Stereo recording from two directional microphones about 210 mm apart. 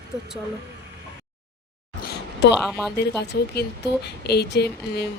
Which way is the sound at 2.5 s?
Centre (ahead or behind).